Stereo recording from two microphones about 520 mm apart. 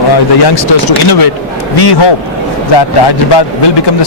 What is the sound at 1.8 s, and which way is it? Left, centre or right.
A man's voice, left.